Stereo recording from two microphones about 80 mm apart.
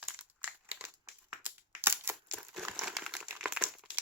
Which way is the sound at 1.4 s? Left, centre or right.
Right.